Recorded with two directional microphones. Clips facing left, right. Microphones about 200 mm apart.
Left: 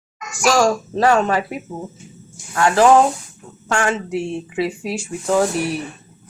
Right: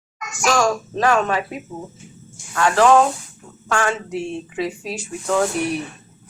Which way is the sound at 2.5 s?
30° left (ahead or behind).